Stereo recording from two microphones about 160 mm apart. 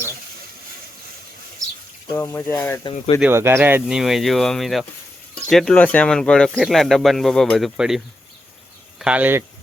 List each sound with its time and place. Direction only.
1.6 s a sound: 20° right (ahead or behind)
2.1 s speech: 15° left (ahead or behind)
3.2 s speech: 15° right (ahead or behind)